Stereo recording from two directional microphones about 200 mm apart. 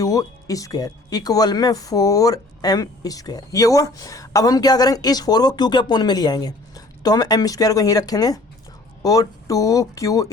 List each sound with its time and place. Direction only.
0.0 s speech: 20° left (ahead or behind)